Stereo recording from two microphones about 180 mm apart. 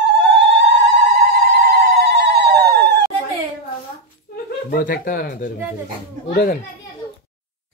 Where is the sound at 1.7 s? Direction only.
65° right (ahead or behind).